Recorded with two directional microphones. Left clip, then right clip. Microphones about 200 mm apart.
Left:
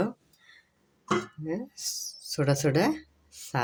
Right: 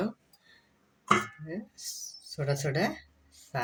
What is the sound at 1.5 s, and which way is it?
Speech, 55° left (ahead or behind).